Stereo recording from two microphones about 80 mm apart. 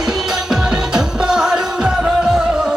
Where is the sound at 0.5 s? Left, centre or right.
Centre.